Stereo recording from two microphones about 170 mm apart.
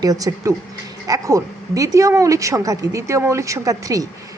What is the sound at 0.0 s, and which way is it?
Speech, 20° right (ahead or behind).